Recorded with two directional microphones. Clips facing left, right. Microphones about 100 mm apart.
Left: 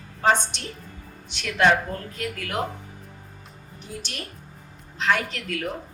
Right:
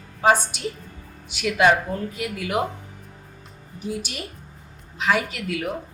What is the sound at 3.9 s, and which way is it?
A woman's voice, 5° right (ahead or behind).